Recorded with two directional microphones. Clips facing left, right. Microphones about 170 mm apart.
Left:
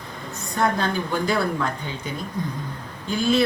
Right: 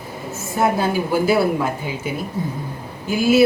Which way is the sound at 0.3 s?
5° right (ahead or behind).